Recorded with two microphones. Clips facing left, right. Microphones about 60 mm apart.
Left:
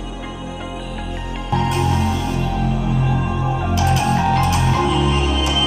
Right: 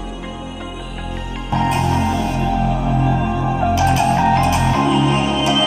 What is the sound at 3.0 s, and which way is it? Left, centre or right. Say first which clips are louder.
Music: right 3 dB; centre.